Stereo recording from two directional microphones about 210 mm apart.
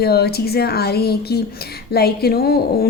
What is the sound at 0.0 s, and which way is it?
Speech, 50° left (ahead or behind).